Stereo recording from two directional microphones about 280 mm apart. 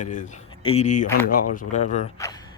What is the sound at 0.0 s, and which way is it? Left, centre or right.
Speech, left.